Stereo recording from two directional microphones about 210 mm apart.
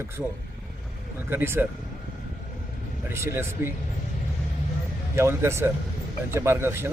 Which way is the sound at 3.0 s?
10° right (ahead or behind).